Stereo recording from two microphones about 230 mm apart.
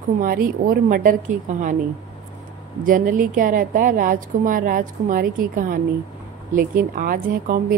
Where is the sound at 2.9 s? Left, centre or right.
Right.